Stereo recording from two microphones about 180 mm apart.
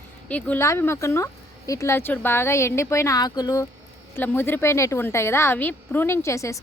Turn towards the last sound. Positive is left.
turn(degrees=15)  # may be behind; listen again after turning